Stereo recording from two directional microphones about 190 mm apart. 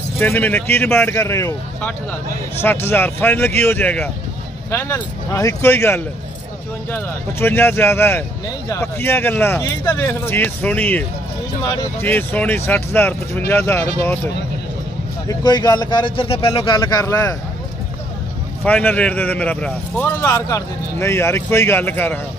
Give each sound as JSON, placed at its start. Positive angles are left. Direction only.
{"t": 0.2, "sound": "speech", "side_deg": 10}
{"t": 18.6, "sound": "speech", "side_deg": 10}